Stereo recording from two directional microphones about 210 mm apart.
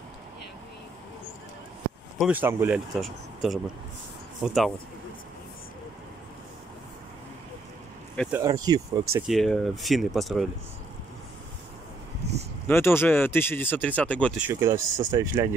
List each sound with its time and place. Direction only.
2.1 s speech: 5° right (ahead or behind)
8.3 s speech: 15° right (ahead or behind)
9.1 s speech: centre (ahead or behind)
12.2 s a sound: 30° right (ahead or behind)
12.6 s speech: 10° left (ahead or behind)
14.4 s speech: 15° right (ahead or behind)